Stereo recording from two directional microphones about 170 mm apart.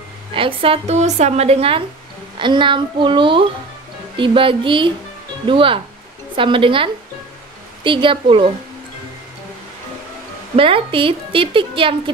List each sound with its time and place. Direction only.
0.3 s speech: 30° right (ahead or behind)
10.5 s speech: 30° right (ahead or behind)